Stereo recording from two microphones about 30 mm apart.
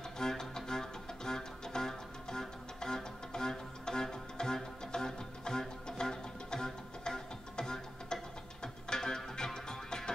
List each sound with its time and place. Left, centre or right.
0.2 s music: centre